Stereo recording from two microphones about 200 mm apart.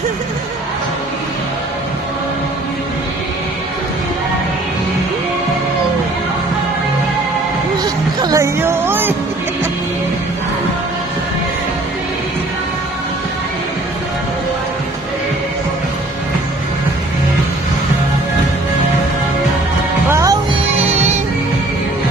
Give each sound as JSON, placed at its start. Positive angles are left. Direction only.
{"t": 7.8, "sound": "music", "side_deg": -20}
{"t": 20.1, "sound": "music", "side_deg": -15}
{"t": 20.8, "sound": "music", "side_deg": -30}